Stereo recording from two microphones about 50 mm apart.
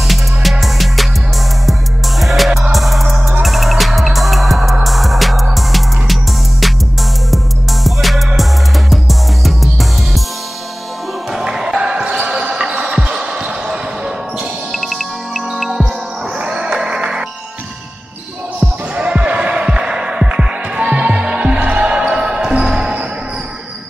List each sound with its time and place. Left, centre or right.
0.1 s music: centre
7.8 s music: centre
11.4 s basketball bounce: centre
14.7 s music: centre
16.3 s music: centre
18.9 s music: right
21.6 s basketball bounce: centre